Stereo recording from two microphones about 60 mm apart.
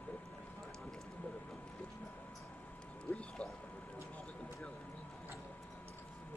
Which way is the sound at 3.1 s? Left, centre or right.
Left.